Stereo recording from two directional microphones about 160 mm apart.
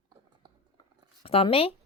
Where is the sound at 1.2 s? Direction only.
35° left (ahead or behind).